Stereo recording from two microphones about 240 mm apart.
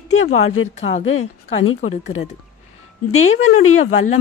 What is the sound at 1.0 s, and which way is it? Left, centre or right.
Speech, left.